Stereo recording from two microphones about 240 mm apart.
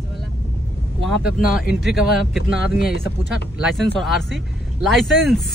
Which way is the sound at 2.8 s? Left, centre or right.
Left.